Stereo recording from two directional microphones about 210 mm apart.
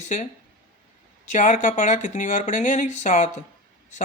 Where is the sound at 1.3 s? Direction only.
35° left (ahead or behind).